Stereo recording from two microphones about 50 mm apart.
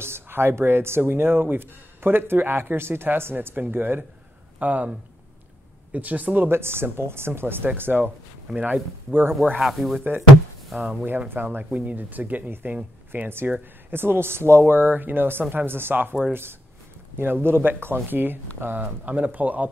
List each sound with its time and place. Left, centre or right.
0.0 s speech: right
4.6 s speech: right
5.9 s speech: right
6.5 s speech: right
8.5 s speech: right
9.6 s speech: centre
9.9 s speech: right
17.2 s speech: right
19.0 s speech: right